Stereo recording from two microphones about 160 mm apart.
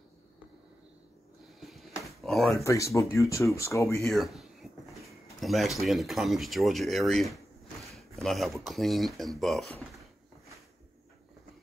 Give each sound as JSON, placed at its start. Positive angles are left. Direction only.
{"t": 1.6, "sound": "a sound", "side_deg": 0}
{"t": 2.0, "sound": "drawer open or close", "side_deg": 0}
{"t": 2.5, "sound": "speech", "side_deg": 20}
{"t": 4.0, "sound": "speech", "side_deg": 0}
{"t": 7.8, "sound": "a sound", "side_deg": 0}
{"t": 8.6, "sound": "speech", "side_deg": 0}